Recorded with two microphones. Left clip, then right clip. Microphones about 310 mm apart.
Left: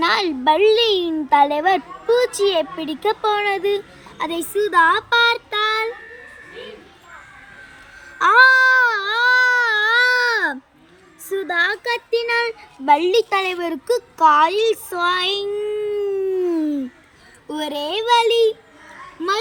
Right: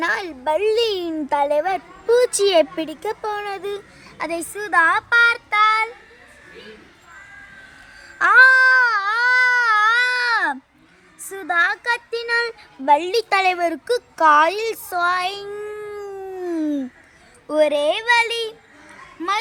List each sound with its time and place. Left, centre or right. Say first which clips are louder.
0.0 s a woman's voice: left 5 dB; right
4.2 s a woman's voice: left 5 dB; centre
8.2 s baby cry: even; centre
11.5 s a woman's voice: right 2 dB; centre
14.9 s a sound: left 1 dB; centre
18.0 s a woman's voice: left 3 dB; centre